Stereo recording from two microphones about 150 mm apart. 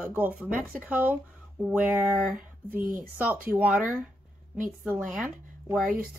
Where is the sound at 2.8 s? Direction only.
70° right (ahead or behind).